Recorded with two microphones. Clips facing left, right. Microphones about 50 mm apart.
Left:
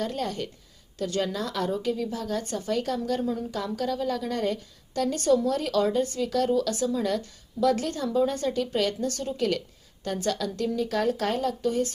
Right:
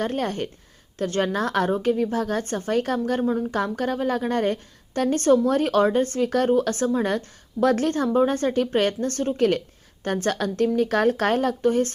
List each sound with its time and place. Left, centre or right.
0.0 s a woman's voice: right